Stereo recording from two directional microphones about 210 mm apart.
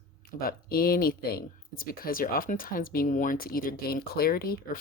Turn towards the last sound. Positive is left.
turn(degrees=45)  # may be behind; listen again after turning